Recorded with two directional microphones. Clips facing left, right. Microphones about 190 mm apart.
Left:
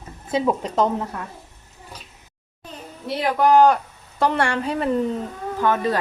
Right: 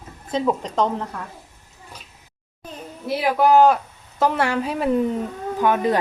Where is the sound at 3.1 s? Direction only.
5° right (ahead or behind).